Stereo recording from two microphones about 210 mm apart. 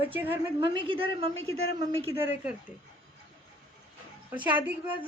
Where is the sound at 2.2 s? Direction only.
10° right (ahead or behind).